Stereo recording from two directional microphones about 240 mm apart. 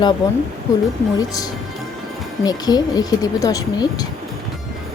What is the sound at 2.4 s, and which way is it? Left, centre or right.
Speech, centre.